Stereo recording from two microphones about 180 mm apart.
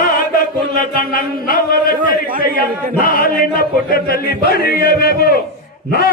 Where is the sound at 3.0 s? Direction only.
55° left (ahead or behind).